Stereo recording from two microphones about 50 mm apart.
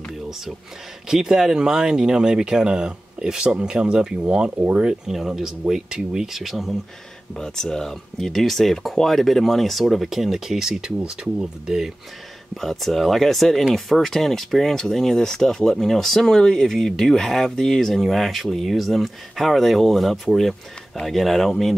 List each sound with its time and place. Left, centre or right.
1.0 s speech: centre
4.6 s speech: right
4.8 s speech: centre
7.3 s speech: centre
11.0 s speech: centre
12.5 s speech: centre